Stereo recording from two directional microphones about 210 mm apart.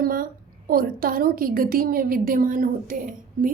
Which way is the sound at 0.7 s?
45° right (ahead or behind).